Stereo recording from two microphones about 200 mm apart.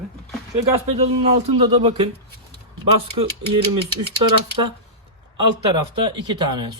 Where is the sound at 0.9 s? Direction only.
30° right (ahead or behind).